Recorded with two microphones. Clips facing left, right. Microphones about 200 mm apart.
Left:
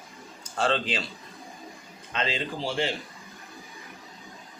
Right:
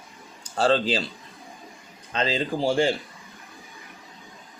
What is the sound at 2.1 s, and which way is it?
Speech, 35° right (ahead or behind).